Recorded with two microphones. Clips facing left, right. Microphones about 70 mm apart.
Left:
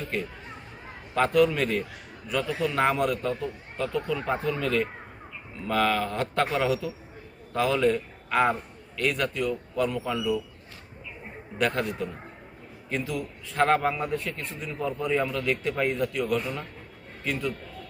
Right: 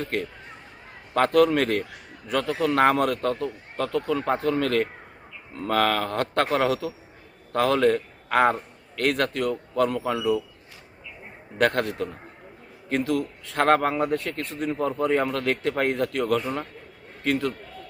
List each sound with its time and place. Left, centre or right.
0.0 s a man's voice: right
11.5 s a man's voice: right
14.7 s a man's voice: right